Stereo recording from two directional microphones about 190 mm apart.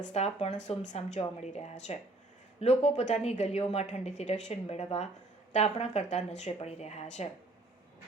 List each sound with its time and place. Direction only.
0.0 s a woman's voice: 35° left (ahead or behind)